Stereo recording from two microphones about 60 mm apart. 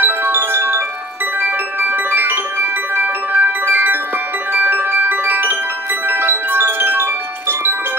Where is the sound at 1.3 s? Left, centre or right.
Right.